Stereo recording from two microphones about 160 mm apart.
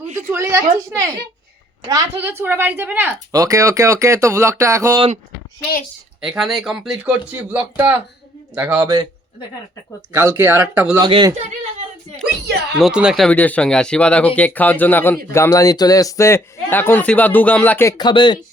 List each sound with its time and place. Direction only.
0.3 s a woman's voice: 15° right (ahead or behind)
6.2 s a woman's voice: centre (ahead or behind); by 9.0 s 20° right (ahead or behind)
10.1 s a woman's voice: 15° right (ahead or behind)
11.0 s speech: 25° right (ahead or behind)
12.7 s speech: 5° right (ahead or behind); by 17.9 s 10° left (ahead or behind)
17.9 s speech: 30° left (ahead or behind)